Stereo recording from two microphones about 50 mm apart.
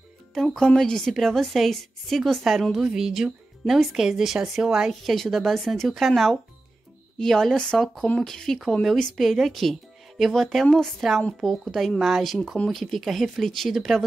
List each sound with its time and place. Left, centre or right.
0.3 s speech: centre
2.8 s a woman's voice: centre
9.1 s speech: centre